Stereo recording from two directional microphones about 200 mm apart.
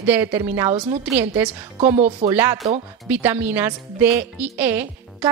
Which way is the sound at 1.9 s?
35° right (ahead or behind).